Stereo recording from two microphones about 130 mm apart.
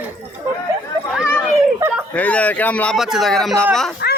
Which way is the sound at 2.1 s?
10° left (ahead or behind).